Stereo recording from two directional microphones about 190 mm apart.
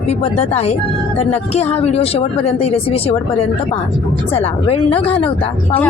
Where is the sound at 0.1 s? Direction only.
30° left (ahead or behind).